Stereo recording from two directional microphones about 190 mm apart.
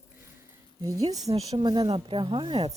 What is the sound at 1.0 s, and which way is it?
Speech, 20° right (ahead or behind).